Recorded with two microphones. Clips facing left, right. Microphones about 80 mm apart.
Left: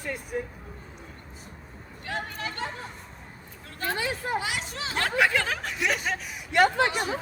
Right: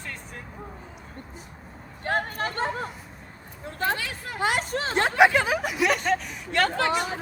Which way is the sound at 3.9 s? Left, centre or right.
Left.